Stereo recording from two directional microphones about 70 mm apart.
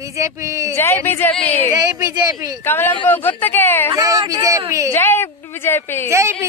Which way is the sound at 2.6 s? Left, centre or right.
Left.